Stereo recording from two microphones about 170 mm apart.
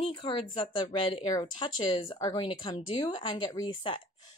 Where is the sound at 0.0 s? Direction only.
30° left (ahead or behind).